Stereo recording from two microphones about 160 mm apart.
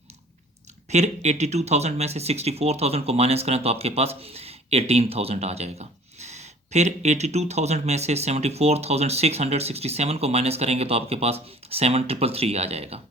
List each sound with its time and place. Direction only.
0.9 s speech: 45° right (ahead or behind)